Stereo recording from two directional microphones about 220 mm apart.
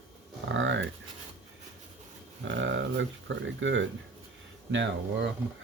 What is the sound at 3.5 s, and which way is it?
Speech, 55° right (ahead or behind).